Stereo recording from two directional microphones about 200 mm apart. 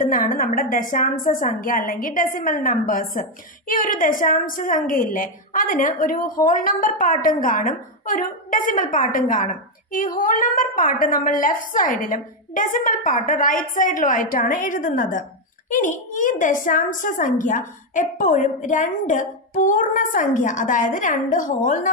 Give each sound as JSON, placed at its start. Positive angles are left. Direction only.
{"t": 0.0, "sound": "a woman's voice", "side_deg": 40}